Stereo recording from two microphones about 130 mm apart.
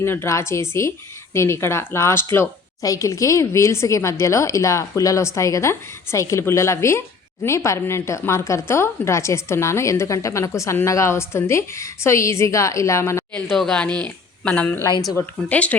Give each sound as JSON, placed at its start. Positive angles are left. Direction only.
{"t": 0.0, "sound": "a woman's voice", "side_deg": 20}
{"t": 13.5, "sound": "speech", "side_deg": 5}